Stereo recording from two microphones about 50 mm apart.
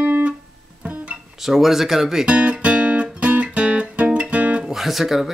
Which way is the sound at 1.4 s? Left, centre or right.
Centre.